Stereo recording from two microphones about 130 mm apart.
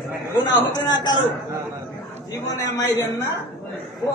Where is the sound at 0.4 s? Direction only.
35° left (ahead or behind).